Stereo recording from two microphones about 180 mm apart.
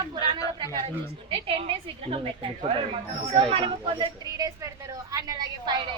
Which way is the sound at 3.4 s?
30° right (ahead or behind).